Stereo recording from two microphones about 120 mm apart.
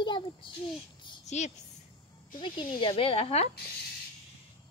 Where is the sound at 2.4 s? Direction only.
45° left (ahead or behind).